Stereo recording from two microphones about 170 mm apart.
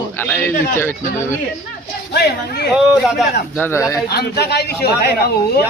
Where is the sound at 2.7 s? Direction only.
5° right (ahead or behind).